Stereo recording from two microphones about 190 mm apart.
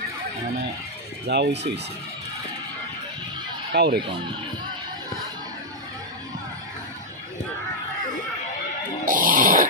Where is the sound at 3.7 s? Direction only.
60° right (ahead or behind).